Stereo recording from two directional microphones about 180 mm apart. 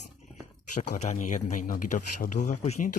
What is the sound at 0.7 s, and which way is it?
A man's voice, 40° left (ahead or behind).